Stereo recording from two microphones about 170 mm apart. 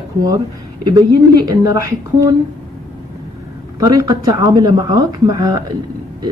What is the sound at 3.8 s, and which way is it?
Speech, 20° right (ahead or behind).